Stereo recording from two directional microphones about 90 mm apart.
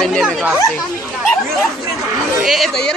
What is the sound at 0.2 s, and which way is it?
Chatter, 5° right (ahead or behind).